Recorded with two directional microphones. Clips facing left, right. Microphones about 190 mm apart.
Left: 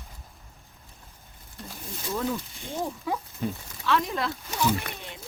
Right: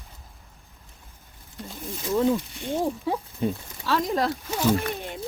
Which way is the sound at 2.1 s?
20° right (ahead or behind).